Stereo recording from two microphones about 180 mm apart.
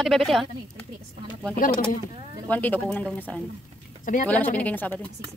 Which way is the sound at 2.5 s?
10° left (ahead or behind).